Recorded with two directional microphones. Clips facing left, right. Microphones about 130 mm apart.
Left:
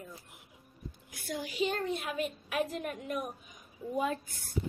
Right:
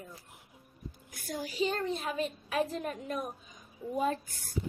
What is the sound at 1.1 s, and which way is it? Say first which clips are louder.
A woman's voice: even; 45° right (ahead or behind).